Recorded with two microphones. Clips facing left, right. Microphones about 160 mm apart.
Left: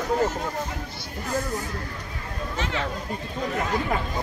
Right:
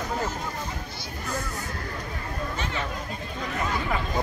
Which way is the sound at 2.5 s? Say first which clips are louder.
Left 6 dB; 90° left.